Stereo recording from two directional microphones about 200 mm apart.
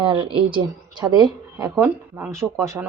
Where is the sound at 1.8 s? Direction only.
10° right (ahead or behind).